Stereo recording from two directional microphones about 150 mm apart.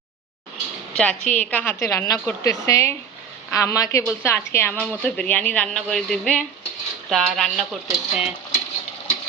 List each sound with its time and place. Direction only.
0.9 s a woman's voice: 5° left (ahead or behind)